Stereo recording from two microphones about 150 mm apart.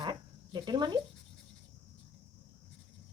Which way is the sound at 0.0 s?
30° right (ahead or behind).